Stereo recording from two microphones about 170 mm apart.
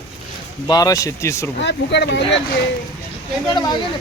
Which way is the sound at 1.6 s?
90° left.